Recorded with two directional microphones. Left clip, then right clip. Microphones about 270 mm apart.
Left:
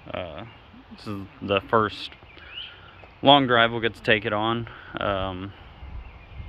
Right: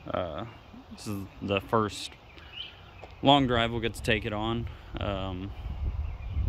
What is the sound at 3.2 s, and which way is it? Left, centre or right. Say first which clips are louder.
Speech: left 6 dB; centre.